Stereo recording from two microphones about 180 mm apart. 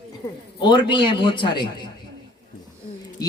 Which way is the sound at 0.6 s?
25° left (ahead or behind).